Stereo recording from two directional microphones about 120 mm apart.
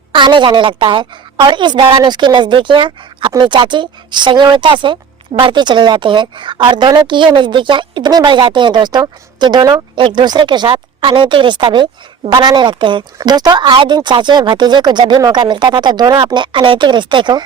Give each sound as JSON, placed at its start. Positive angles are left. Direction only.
{"t": 0.1, "sound": "a woman's voice", "side_deg": -40}